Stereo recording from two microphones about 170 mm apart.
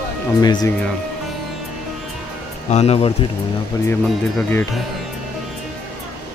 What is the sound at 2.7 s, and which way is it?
Speech, 40° left (ahead or behind).